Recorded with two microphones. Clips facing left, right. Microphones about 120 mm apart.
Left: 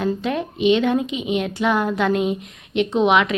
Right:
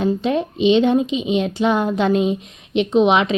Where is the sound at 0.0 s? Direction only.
20° right (ahead or behind).